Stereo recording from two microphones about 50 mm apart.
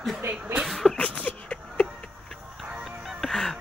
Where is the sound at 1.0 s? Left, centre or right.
Left.